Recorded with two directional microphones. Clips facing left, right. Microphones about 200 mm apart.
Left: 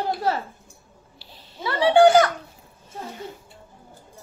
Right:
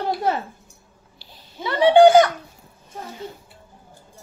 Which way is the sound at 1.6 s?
20° right (ahead or behind).